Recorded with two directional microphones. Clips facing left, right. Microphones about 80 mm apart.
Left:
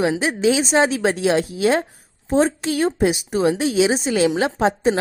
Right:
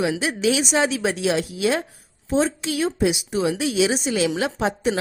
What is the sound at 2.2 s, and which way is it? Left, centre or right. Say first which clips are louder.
A woman's voice: left 3 dB; left.